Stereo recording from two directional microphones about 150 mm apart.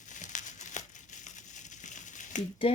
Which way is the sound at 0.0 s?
55° left (ahead or behind).